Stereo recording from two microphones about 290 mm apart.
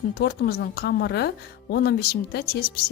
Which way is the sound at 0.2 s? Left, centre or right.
Left.